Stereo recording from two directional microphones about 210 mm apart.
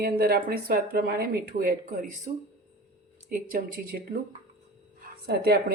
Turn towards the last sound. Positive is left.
turn(degrees=-50)  # may be behind; listen again after turning